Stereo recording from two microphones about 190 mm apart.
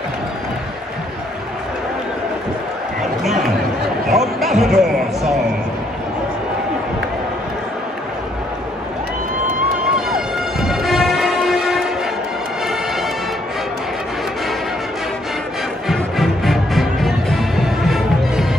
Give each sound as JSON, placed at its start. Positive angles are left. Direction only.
{"t": 4.1, "sound": "speech", "side_deg": 0}
{"t": 10.1, "sound": "a sound", "side_deg": 0}
{"t": 15.9, "sound": "music", "side_deg": 0}